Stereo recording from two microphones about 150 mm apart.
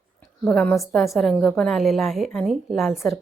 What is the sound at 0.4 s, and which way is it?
A woman's voice, 5° left (ahead or behind).